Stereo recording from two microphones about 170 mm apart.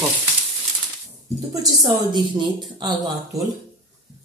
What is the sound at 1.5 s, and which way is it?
A woman's voice, 20° right (ahead or behind).